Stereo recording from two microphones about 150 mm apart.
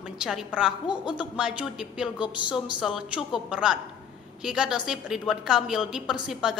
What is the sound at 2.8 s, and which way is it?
A woman's voice, 5° right (ahead or behind).